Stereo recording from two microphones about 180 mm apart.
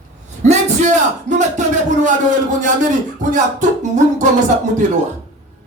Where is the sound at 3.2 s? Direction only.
45° right (ahead or behind).